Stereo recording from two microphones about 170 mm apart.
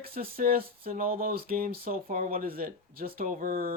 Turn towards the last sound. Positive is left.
turn(degrees=-55)  # may be behind; listen again after turning